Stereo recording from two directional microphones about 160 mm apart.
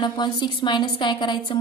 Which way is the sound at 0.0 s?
30° left (ahead or behind).